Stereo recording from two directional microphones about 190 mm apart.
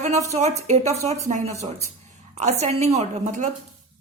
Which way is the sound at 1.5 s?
15° right (ahead or behind).